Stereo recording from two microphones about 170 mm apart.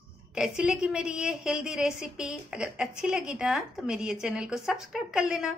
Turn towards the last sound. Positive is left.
turn(degrees=-5)  # may be behind; listen again after turning